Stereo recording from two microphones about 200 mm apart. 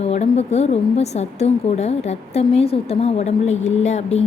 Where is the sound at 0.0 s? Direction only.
30° left (ahead or behind).